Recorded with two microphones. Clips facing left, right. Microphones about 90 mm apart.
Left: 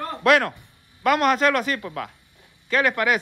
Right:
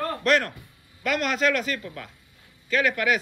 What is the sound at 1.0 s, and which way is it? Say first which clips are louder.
Speech: left 5 dB; 50° left (ahead or behind).